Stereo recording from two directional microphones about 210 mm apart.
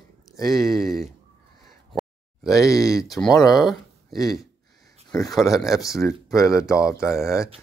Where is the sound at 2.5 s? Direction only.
15° left (ahead or behind).